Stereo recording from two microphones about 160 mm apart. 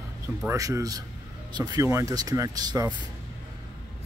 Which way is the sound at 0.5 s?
20° right (ahead or behind).